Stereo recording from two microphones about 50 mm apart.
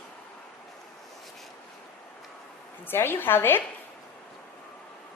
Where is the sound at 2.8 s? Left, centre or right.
Left.